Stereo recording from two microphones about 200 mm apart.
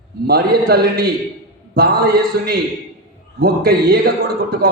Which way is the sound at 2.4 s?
50° right (ahead or behind).